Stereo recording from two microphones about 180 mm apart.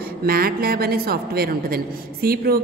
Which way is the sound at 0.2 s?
55° right (ahead or behind).